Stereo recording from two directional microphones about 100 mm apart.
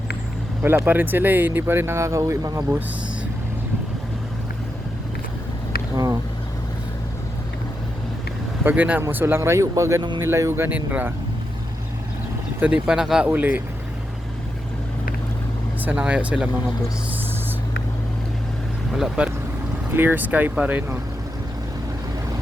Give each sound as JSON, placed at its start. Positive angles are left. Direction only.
{"t": 0.6, "sound": "speech", "side_deg": -20}
{"t": 8.6, "sound": "speech", "side_deg": -15}
{"t": 12.5, "sound": "speech", "side_deg": -15}
{"t": 13.3, "sound": "speech", "side_deg": -15}
{"t": 15.8, "sound": "speech", "side_deg": -15}
{"t": 18.9, "sound": "speech", "side_deg": -5}
{"t": 19.9, "sound": "speech", "side_deg": -20}